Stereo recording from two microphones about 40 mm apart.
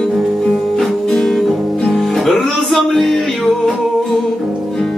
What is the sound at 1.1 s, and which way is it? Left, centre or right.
Guitar, centre.